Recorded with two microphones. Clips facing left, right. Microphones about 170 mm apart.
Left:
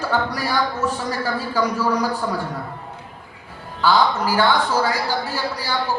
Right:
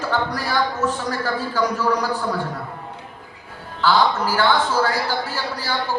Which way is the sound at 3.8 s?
10° left (ahead or behind).